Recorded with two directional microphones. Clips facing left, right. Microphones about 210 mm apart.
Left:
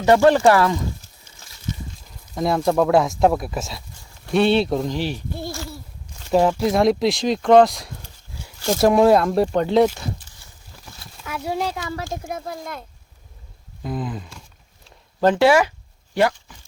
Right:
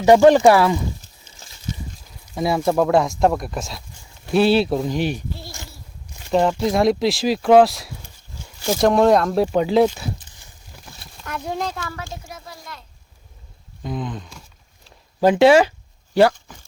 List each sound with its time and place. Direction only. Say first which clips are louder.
0.0 s speech: right 3 dB; 15° right (ahead or behind)
2.3 s speech: even; 5° right (ahead or behind)
4.9 s speech: right 3 dB; 15° right (ahead or behind)
6.3 s speech: left 1 dB; 5° left (ahead or behind)
11.2 s speech: left 1 dB; 5° left (ahead or behind)
11.9 s speech: left 6 dB; 50° left (ahead or behind)
13.8 s speech: even; 5° left (ahead or behind)
14.8 s a sound: right 1 dB; 10° right (ahead or behind)
15.4 s speech: right 4 dB; 25° right (ahead or behind)